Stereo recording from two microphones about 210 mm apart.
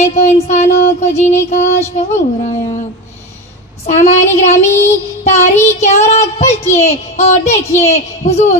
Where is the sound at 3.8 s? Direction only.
30° left (ahead or behind).